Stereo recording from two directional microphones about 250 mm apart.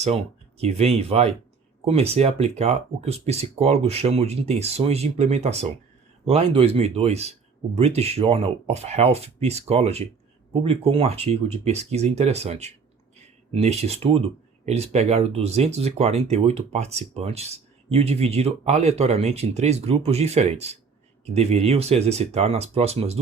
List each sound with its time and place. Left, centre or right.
0.0 s speech: right